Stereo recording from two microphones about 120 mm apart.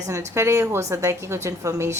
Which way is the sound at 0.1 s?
25° right (ahead or behind).